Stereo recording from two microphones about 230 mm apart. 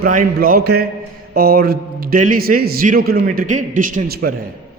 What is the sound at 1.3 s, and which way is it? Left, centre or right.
A man's voice, right.